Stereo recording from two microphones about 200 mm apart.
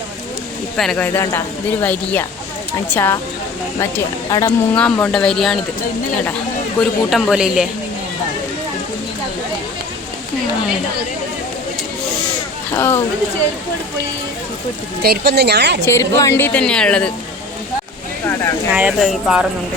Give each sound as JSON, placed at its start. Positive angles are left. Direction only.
{"t": 0.8, "sound": "speech", "side_deg": 5}
{"t": 4.3, "sound": "speech", "side_deg": 20}
{"t": 4.7, "sound": "a woman's voice", "side_deg": 5}
{"t": 6.7, "sound": "a woman's voice", "side_deg": 0}
{"t": 12.7, "sound": "speech", "side_deg": 10}
{"t": 15.0, "sound": "a woman's voice", "side_deg": -55}
{"t": 15.8, "sound": "a woman's voice", "side_deg": 15}
{"t": 18.7, "sound": "a woman's voice", "side_deg": -5}